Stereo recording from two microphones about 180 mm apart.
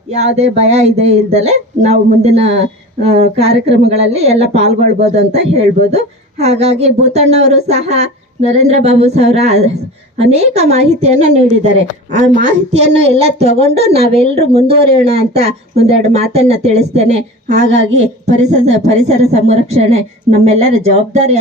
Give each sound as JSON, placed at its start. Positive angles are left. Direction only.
{"t": 0.2, "sound": "speech", "side_deg": -40}
{"t": 12.7, "sound": "speech", "side_deg": -35}